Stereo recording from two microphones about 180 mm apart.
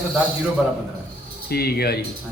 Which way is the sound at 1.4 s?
60° left (ahead or behind).